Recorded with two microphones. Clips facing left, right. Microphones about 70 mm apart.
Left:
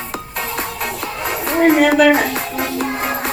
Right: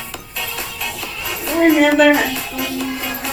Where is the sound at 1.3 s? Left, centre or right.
Left.